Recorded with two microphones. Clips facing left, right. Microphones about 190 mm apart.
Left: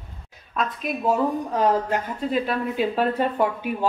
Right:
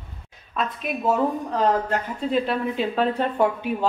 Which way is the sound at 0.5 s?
Centre (ahead or behind).